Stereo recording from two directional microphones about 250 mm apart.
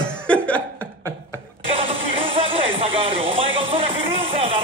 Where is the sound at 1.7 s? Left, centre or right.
Right.